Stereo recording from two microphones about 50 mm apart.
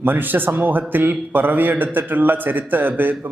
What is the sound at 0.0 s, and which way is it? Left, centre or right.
A man's voice, right.